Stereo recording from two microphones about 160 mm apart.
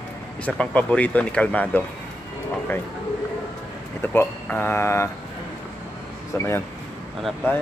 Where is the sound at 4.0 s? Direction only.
15° left (ahead or behind).